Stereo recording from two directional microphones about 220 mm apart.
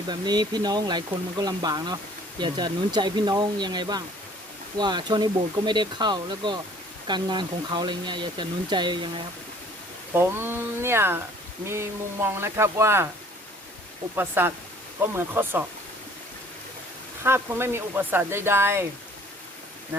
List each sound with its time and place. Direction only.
0.1 s speech: 20° right (ahead or behind)
10.1 s speech: 10° right (ahead or behind)
14.2 s speech: 10° right (ahead or behind)
17.2 s speech: 10° right (ahead or behind)